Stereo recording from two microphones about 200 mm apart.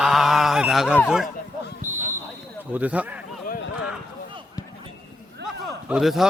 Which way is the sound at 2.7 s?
5° right (ahead or behind).